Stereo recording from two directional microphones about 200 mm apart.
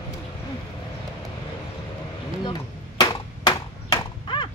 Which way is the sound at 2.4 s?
20° left (ahead or behind).